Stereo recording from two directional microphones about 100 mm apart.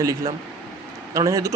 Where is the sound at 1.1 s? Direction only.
30° right (ahead or behind).